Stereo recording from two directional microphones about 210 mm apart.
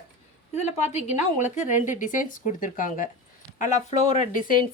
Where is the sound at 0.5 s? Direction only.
30° left (ahead or behind).